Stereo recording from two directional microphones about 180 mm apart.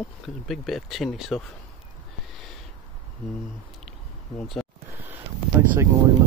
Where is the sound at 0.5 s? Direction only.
Centre (ahead or behind).